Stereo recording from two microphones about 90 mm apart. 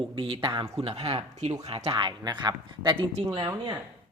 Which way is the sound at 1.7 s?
65° right (ahead or behind).